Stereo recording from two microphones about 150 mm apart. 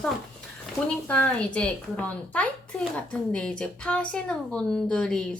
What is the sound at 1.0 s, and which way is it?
A woman's voice, 10° left (ahead or behind).